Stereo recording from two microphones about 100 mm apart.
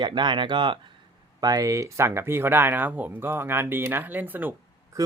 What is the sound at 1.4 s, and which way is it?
Speech, 35° right (ahead or behind).